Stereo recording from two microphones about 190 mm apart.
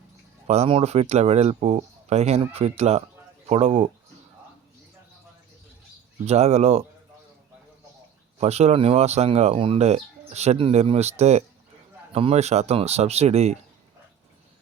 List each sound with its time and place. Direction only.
0.4 s speech: 35° right (ahead or behind)
6.2 s speech: 35° right (ahead or behind)
8.4 s speech: 35° right (ahead or behind)